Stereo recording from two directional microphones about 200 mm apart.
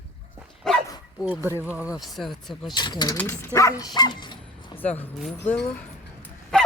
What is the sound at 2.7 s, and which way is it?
Speech, 20° left (ahead or behind).